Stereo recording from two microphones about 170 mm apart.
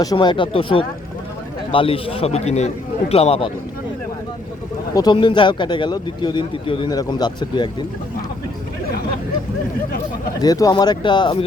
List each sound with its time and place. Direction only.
0.0 s a man's voice: 25° left (ahead or behind)
4.9 s speech: 25° left (ahead or behind)
10.4 s speech: 20° left (ahead or behind)